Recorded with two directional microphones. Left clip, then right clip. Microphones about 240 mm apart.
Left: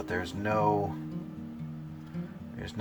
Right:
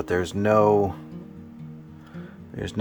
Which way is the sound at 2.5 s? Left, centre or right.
Right.